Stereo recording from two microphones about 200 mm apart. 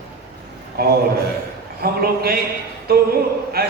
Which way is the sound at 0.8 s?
50° right (ahead or behind).